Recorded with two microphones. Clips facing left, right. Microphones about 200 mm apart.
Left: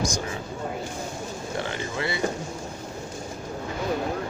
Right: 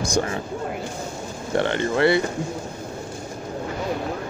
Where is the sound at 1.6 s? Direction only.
65° right (ahead or behind).